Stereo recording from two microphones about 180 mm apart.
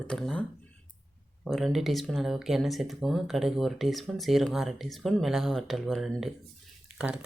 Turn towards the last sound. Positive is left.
turn(degrees=-5)  # may be behind; listen again after turning